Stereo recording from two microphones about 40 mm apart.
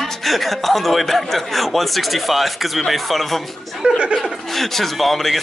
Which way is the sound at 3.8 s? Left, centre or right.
Right.